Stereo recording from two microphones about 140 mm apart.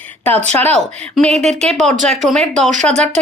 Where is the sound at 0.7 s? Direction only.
5° left (ahead or behind).